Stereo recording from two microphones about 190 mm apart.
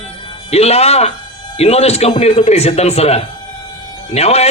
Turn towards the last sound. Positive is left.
turn(degrees=35)  # may be behind; listen again after turning